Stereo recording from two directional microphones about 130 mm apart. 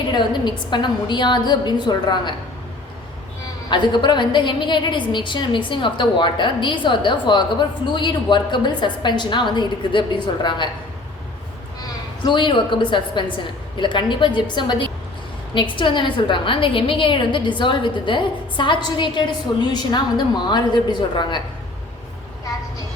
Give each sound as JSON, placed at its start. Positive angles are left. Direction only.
{"t": 0.1, "sound": "a woman's voice", "side_deg": 35}
{"t": 3.7, "sound": "a woman's voice", "side_deg": 35}
{"t": 12.2, "sound": "a woman's voice", "side_deg": 35}